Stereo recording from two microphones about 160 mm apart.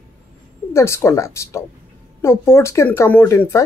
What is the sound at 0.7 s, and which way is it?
Speech, 15° left (ahead or behind).